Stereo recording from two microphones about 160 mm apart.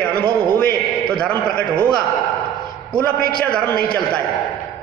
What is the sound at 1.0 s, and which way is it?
Speech, 5° left (ahead or behind).